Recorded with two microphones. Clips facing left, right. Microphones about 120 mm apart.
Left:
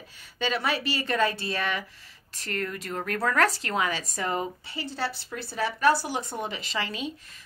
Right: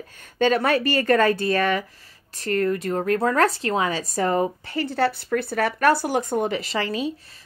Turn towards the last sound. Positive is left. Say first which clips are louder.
# right 7 dB
turn(degrees=-40)  # may be behind; listen again after turning